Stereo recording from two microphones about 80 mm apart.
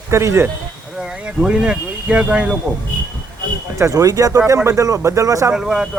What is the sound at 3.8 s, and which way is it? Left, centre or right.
Speech, right.